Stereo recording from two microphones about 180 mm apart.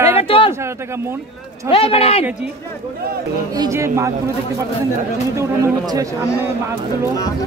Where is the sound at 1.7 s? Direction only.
30° left (ahead or behind).